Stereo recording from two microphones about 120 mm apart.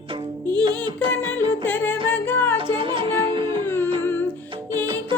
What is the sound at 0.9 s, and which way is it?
Music, 15° left (ahead or behind).